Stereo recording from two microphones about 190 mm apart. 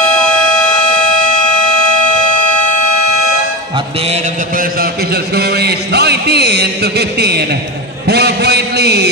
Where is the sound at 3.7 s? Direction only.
30° right (ahead or behind); by 7.6 s 60° right (ahead or behind).